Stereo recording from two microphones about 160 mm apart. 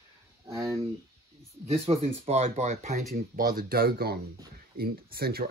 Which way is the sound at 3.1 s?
70° right (ahead or behind).